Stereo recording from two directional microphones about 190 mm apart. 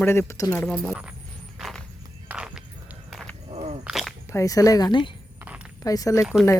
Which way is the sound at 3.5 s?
35° right (ahead or behind).